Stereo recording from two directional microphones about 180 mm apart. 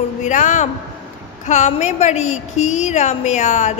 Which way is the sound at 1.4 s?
40° left (ahead or behind).